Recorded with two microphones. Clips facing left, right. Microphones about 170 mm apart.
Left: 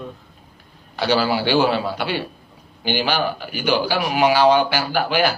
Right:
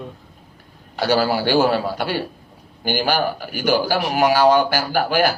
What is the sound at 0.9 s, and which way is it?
A man's voice, 50° right (ahead or behind).